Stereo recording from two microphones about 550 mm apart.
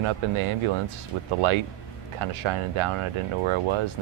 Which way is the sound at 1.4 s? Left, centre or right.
Right.